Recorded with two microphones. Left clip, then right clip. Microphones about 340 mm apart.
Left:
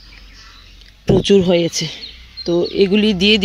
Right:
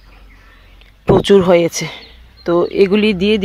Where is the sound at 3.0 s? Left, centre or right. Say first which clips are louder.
Even; centre.